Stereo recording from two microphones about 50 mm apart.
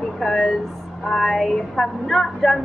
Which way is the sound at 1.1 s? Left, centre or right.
Centre.